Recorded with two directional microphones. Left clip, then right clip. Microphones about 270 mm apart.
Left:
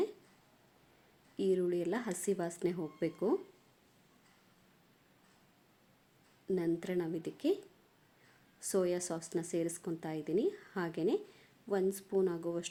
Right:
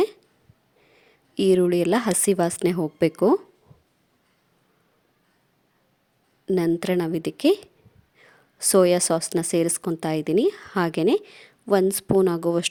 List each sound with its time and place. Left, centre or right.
1.4 s a woman's voice: right
6.4 s a woman's voice: right